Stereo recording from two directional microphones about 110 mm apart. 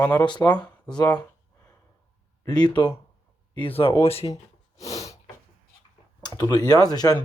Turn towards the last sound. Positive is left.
turn(degrees=35)  # may be behind; listen again after turning